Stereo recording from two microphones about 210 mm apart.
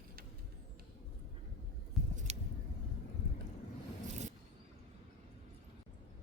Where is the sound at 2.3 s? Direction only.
30° right (ahead or behind).